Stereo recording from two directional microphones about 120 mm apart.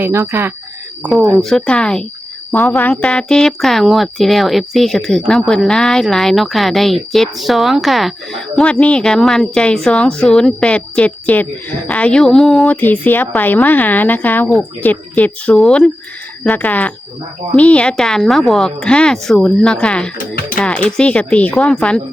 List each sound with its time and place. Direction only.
0.0 s speech: 20° right (ahead or behind)
1.4 s speech: centre (ahead or behind)
12.7 s speech: 15° left (ahead or behind)
15.5 s speech: centre (ahead or behind)